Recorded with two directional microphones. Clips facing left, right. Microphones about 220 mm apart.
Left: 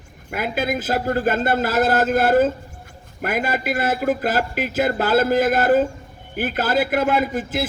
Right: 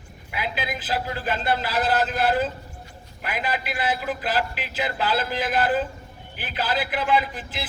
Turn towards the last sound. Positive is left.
turn(degrees=45)  # may be behind; listen again after turning